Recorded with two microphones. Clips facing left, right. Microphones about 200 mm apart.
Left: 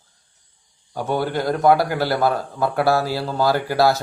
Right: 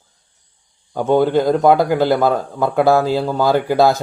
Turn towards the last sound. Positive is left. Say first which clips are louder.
# right 4 dB
turn(degrees=-20)  # may be behind; listen again after turning